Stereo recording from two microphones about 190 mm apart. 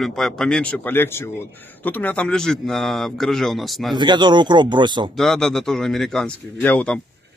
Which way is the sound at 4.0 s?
25° right (ahead or behind).